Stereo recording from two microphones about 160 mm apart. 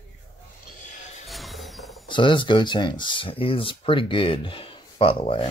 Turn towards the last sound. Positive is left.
turn(degrees=35)  # may be behind; listen again after turning